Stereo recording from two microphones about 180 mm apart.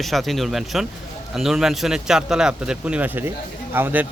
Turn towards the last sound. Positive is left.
turn(degrees=-10)  # may be behind; listen again after turning